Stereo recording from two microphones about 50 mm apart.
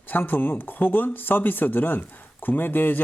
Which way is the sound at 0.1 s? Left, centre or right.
Left.